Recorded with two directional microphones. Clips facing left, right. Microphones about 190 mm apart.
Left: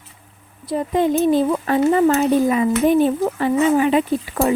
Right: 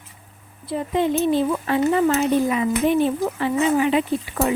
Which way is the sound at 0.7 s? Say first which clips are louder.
Left 3 dB; 45° left (ahead or behind).